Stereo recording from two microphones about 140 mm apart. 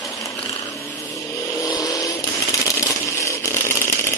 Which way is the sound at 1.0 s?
20° left (ahead or behind).